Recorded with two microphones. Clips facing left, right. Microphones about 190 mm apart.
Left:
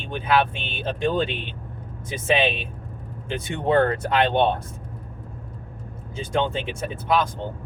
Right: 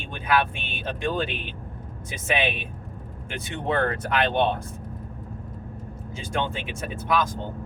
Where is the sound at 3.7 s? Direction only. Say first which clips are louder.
Left 5 dB; 25° left (ahead or behind).